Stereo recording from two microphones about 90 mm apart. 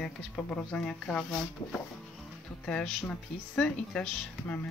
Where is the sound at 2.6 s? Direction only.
10° left (ahead or behind).